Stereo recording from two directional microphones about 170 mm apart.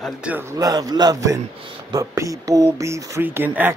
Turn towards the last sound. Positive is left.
turn(degrees=-10)  # may be behind; listen again after turning